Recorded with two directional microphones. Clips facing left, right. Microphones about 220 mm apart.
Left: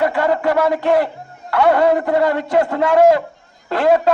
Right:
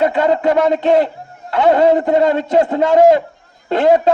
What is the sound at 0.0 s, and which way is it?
A man's voice, 20° right (ahead or behind).